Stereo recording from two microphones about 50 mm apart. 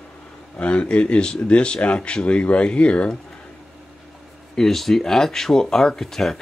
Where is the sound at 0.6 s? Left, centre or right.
Left.